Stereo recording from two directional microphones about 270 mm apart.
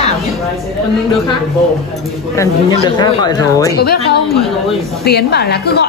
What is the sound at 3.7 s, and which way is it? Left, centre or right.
A woman's voice, left.